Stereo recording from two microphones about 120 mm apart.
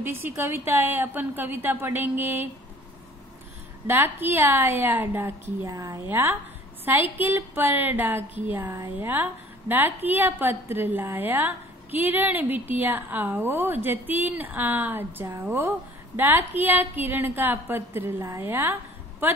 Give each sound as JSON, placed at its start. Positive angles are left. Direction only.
{"t": 0.0, "sound": "a woman's voice", "side_deg": -15}
{"t": 3.8, "sound": "a woman's voice", "side_deg": -20}
{"t": 8.6, "sound": "a woman's voice", "side_deg": -30}
{"t": 9.1, "sound": "a woman's voice", "side_deg": -15}